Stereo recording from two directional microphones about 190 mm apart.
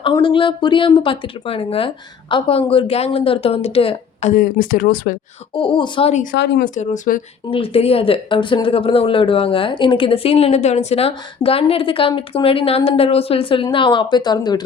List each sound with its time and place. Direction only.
0.0 s speech: 25° left (ahead or behind)
4.4 s speech: 50° left (ahead or behind)
5.5 s speech: 25° left (ahead or behind)
6.3 s speech: 60° left (ahead or behind)
6.7 s speech: 40° left (ahead or behind)
7.5 s speech: 30° left (ahead or behind)